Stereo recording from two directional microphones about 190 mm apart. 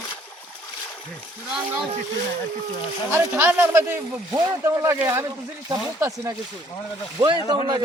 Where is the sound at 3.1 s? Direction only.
10° right (ahead or behind).